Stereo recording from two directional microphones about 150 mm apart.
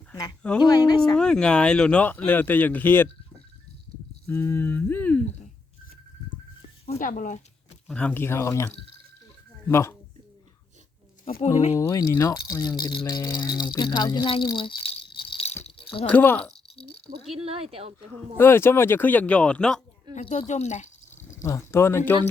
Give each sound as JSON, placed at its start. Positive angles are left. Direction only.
{"t": 0.6, "sound": "speech", "side_deg": 25}
{"t": 1.1, "sound": "speech", "side_deg": 5}
{"t": 4.3, "sound": "speech", "side_deg": 15}
{"t": 7.0, "sound": "speech", "side_deg": 65}
{"t": 7.9, "sound": "speech", "side_deg": 10}
{"t": 11.8, "sound": "speech", "side_deg": 20}
{"t": 15.8, "sound": "a sound", "side_deg": 35}
{"t": 16.0, "sound": "speech", "side_deg": 15}
{"t": 16.7, "sound": "a sound", "side_deg": 40}
{"t": 17.3, "sound": "a woman's voice", "side_deg": -40}
{"t": 18.3, "sound": "speech", "side_deg": 15}
{"t": 20.5, "sound": "a sound", "side_deg": 50}
{"t": 21.4, "sound": "speech", "side_deg": 20}